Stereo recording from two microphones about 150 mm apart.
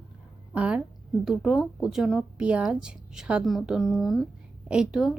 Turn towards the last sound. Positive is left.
turn(degrees=-5)  # may be behind; listen again after turning